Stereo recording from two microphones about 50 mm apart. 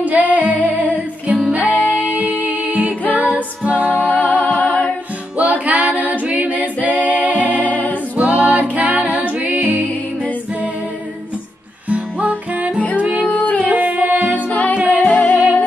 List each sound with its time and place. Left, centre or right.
0.0 s music: right
1.6 s music: left
2.1 s music: right
4.0 s music: left
5.4 s a capella: right
7.5 s music: left
8.2 s music: right
11.9 s music: right
12.7 s music: left
13.6 s music: right
14.5 s music: left